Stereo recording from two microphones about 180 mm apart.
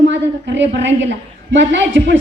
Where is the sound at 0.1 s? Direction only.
80° right.